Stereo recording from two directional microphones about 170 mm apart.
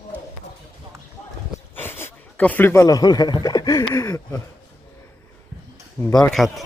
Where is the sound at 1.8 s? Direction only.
15° left (ahead or behind).